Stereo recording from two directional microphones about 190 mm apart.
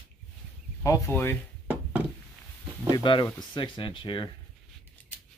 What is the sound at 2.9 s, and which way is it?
Speech, 25° left (ahead or behind).